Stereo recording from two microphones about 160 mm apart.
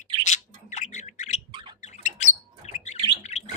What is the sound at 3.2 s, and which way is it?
Bird, 45° left (ahead or behind).